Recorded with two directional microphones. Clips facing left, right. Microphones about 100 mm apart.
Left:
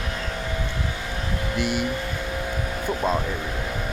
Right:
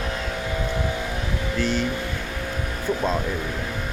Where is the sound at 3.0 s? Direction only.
10° left (ahead or behind).